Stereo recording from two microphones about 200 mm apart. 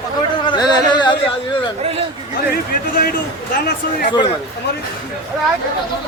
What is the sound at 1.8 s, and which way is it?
Speech, 30° right (ahead or behind).